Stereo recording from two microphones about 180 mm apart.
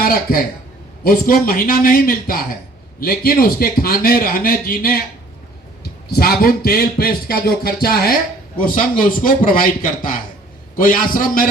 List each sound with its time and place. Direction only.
0.0 s a man's voice: 55° left (ahead or behind)
6.1 s a man's voice: 60° left (ahead or behind)